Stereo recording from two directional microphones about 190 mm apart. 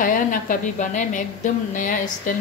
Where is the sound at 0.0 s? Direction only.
45° left (ahead or behind).